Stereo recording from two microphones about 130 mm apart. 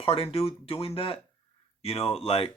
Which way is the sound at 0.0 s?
45° left (ahead or behind).